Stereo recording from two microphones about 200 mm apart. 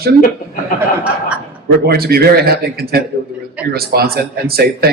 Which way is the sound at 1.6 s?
50° right (ahead or behind).